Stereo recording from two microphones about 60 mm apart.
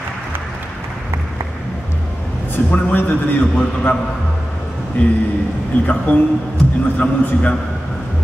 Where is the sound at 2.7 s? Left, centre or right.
Left.